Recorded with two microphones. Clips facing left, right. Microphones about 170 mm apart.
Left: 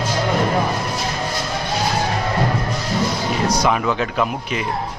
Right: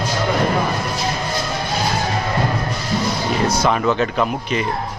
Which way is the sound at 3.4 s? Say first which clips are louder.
Right 1 dB; 15° left (ahead or behind).